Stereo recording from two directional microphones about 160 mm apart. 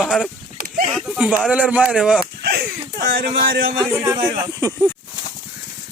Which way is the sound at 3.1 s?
65° right (ahead or behind).